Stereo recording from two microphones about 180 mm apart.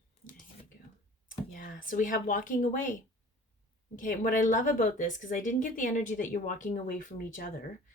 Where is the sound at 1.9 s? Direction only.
50° left (ahead or behind).